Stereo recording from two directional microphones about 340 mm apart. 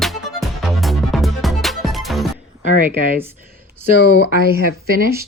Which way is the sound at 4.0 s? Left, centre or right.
Left.